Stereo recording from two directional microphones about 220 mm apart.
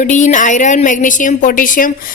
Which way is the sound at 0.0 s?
35° left (ahead or behind).